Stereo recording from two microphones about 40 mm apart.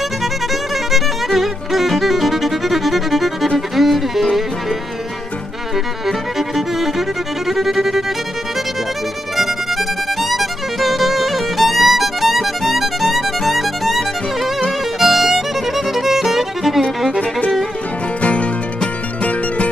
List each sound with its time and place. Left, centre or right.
0.2 s music: centre
6.0 s music: centre
9.4 s music: centre
15.0 s violin: centre
18.2 s music: left